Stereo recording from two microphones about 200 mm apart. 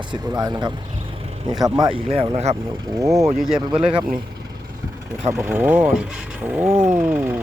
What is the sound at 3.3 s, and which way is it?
Speech, centre (ahead or behind).